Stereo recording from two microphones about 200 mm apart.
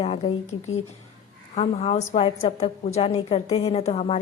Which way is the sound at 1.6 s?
30° left (ahead or behind).